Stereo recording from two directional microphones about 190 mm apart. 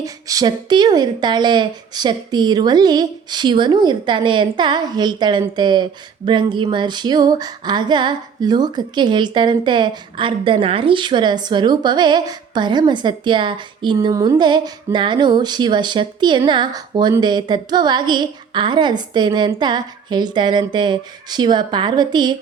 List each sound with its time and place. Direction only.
0.0 s a woman's voice: 20° right (ahead or behind)